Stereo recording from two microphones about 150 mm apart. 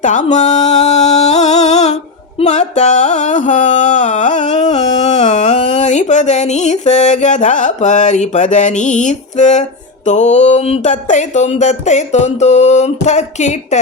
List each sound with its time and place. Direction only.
0.0 s music: 55° left (ahead or behind)
10.1 s speech: 50° left (ahead or behind)